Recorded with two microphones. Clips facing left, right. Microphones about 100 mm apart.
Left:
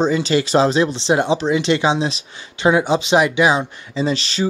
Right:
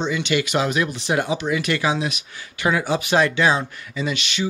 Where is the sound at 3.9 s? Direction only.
35° left (ahead or behind).